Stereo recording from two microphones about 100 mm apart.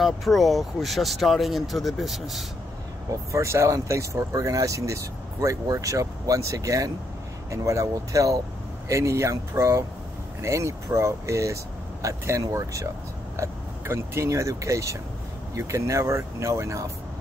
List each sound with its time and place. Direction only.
0.0 s speech: centre (ahead or behind)
3.1 s speech: 30° right (ahead or behind)